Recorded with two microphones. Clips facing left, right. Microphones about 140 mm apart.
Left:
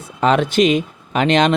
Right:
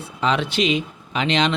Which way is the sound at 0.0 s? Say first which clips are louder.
Left 6 dB; 50° left (ahead or behind).